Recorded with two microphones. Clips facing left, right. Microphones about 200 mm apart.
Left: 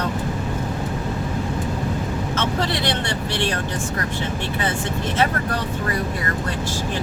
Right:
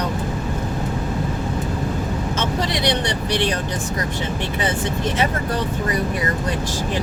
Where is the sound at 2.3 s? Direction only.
15° right (ahead or behind).